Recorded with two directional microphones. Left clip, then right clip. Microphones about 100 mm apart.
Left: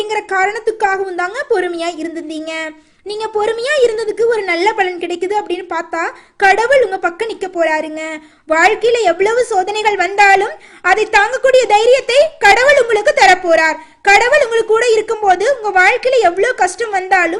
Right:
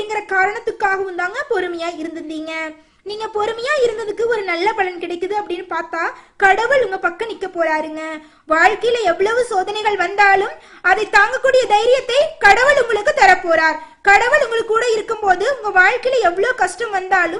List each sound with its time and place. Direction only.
0.1 s a woman's voice: 45° left (ahead or behind)
3.2 s a woman's voice: 40° left (ahead or behind)